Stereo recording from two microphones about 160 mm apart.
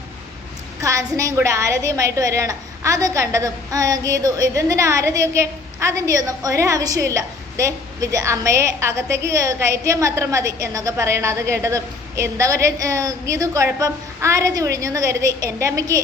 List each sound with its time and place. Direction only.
0.8 s a woman's voice: 20° right (ahead or behind)